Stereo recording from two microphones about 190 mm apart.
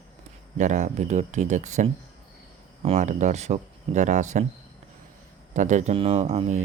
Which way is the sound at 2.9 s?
40° right (ahead or behind).